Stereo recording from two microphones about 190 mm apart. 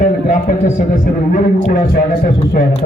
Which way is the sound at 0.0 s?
40° left (ahead or behind).